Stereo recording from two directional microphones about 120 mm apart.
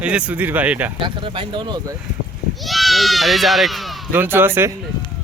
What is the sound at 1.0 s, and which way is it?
Speech, 45° right (ahead or behind).